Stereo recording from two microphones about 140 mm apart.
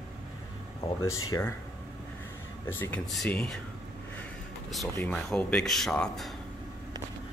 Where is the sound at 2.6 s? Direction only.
15° left (ahead or behind).